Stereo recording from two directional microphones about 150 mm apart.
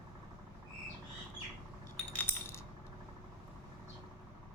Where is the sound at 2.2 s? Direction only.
15° left (ahead or behind).